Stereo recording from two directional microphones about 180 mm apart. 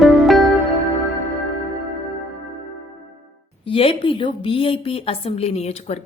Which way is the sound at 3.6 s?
30° left (ahead or behind).